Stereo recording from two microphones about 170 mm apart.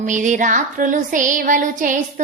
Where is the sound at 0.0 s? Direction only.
50° right (ahead or behind).